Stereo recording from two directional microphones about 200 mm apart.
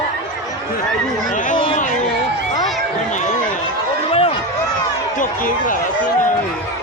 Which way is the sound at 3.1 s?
35° left (ahead or behind).